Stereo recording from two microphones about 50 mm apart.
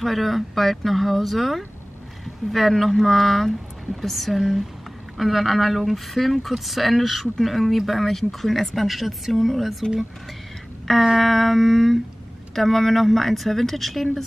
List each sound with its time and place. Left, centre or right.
0.0 s speech: centre
11.1 s speech: centre